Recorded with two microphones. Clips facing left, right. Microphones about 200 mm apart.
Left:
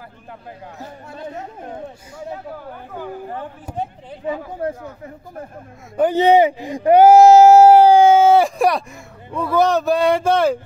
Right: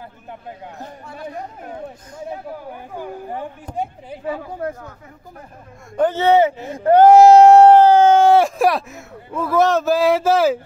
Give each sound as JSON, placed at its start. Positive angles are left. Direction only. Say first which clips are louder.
{"t": 2.1, "sound": "speech", "louder": "right 1 dB", "side_deg": -15}
{"t": 5.9, "sound": "speech", "louder": "left 1 dB", "side_deg": 15}